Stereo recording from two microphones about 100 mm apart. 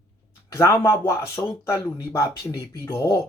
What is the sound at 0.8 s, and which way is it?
Speech, 25° left (ahead or behind).